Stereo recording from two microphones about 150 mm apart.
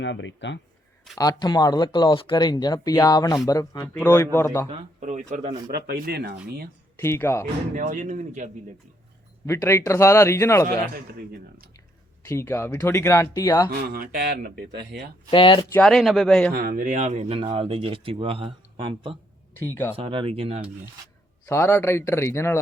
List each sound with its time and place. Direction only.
1.2 s speech: 25° left (ahead or behind)
4.9 s speech: 50° right (ahead or behind)
5.7 s speech: 90° right
7.0 s speech: 15° left (ahead or behind)
7.8 s speech: 60° right (ahead or behind)
9.5 s speech: 20° left (ahead or behind)
12.2 s speech: 20° left (ahead or behind)
13.7 s speech: 90° right
15.3 s speech: 35° left (ahead or behind)
15.7 s speech: 5° left (ahead or behind)
16.6 s speech: 70° right (ahead or behind); by 19.1 s 35° right (ahead or behind)
19.5 s speech: 15° left (ahead or behind)
20.0 s speech: 35° right (ahead or behind)
21.4 s speech: 20° left (ahead or behind)